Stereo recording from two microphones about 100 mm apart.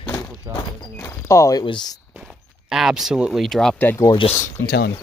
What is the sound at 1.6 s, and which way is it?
Speech, 50° left (ahead or behind).